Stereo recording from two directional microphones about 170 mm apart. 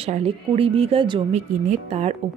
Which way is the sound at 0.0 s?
35° right (ahead or behind).